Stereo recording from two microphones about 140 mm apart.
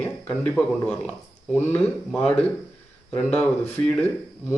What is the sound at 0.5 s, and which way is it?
Speech, 10° left (ahead or behind).